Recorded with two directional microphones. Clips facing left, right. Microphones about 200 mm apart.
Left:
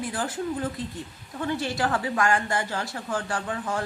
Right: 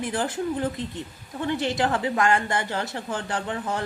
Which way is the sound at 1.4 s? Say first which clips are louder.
Right 2 dB; 20° right (ahead or behind).